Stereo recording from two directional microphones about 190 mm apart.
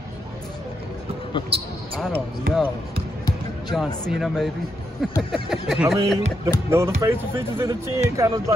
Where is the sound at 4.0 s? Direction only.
Centre (ahead or behind).